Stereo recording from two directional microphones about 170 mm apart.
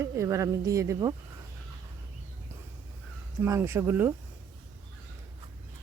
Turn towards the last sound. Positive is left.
turn(degrees=-10)  # may be behind; listen again after turning